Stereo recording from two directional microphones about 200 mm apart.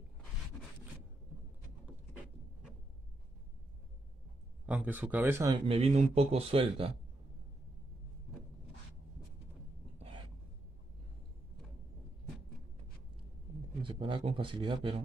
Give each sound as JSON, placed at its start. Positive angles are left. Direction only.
{"t": 4.6, "sound": "speech", "side_deg": -10}
{"t": 5.7, "sound": "speech", "side_deg": -30}
{"t": 9.9, "sound": "a sound", "side_deg": -30}
{"t": 13.8, "sound": "speech", "side_deg": -25}